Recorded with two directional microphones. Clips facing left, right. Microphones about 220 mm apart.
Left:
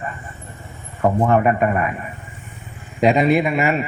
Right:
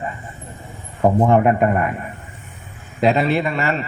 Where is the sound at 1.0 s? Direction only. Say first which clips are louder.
Right 2 dB; 15° right (ahead or behind).